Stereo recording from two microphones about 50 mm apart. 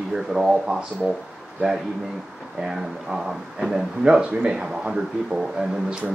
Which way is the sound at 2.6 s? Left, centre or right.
Centre.